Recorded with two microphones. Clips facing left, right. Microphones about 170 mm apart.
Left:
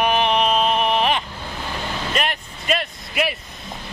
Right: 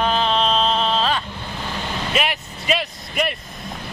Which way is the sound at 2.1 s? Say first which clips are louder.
Right 3 dB; 5° right (ahead or behind).